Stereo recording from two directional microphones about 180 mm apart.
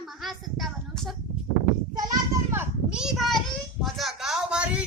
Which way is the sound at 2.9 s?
Centre (ahead or behind).